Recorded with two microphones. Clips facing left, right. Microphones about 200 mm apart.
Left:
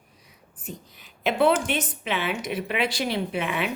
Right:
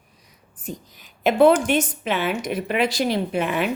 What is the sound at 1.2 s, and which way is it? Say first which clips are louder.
A woman's voice: right 6 dB; 45° right (ahead or behind).